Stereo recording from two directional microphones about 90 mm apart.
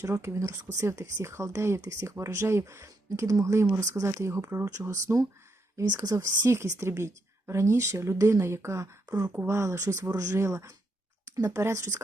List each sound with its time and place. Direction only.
0.0 s speech: 30° right (ahead or behind)
5.8 s speech: 45° right (ahead or behind)
9.3 s speech: 25° right (ahead or behind)